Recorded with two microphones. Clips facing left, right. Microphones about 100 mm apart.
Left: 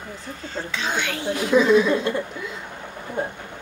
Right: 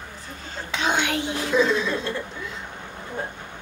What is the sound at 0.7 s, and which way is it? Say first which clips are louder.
Speech: right 4 dB; 20° right (ahead or behind).